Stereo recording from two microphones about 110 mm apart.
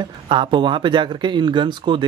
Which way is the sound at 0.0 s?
45° right (ahead or behind).